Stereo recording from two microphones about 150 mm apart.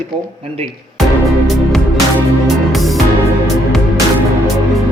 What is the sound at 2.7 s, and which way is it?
Music, centre (ahead or behind).